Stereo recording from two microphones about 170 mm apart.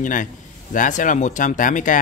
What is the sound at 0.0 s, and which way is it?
Speech, 50° left (ahead or behind).